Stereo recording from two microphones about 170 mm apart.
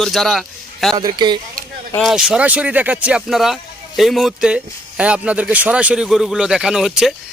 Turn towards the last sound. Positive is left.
turn(degrees=-5)  # may be behind; listen again after turning